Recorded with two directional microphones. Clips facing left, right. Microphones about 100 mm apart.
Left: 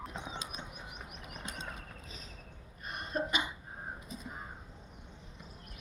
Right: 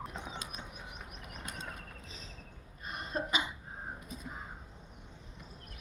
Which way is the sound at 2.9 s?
30° right (ahead or behind).